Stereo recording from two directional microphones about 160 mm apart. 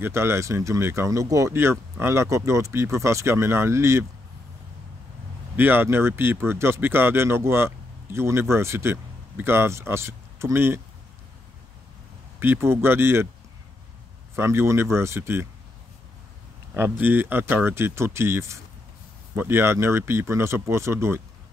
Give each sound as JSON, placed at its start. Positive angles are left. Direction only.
{"t": 0.0, "sound": "speech", "side_deg": -15}
{"t": 5.6, "sound": "speech", "side_deg": -15}
{"t": 12.4, "sound": "speech", "side_deg": -15}
{"t": 14.3, "sound": "speech", "side_deg": -15}
{"t": 16.7, "sound": "speech", "side_deg": -15}